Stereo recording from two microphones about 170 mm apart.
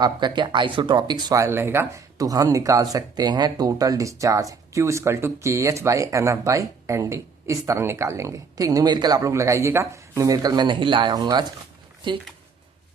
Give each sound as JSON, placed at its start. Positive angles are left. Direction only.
{"t": 0.0, "sound": "speech", "side_deg": -25}